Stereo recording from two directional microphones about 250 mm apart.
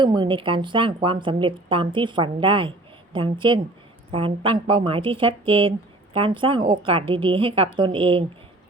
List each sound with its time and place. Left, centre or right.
0.0 s a woman's voice: centre